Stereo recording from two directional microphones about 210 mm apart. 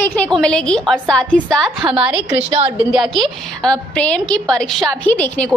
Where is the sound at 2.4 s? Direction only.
30° right (ahead or behind).